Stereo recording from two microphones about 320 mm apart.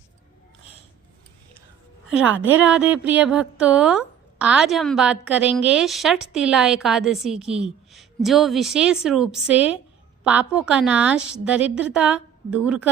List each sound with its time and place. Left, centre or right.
2.0 s a woman's voice: centre